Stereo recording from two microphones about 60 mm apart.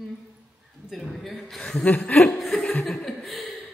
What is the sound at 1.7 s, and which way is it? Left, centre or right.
Chuckle, left.